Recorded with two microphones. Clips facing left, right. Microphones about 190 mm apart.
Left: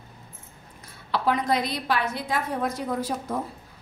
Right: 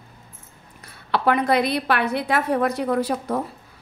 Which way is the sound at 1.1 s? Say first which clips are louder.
Right 5 dB; 65° right (ahead or behind).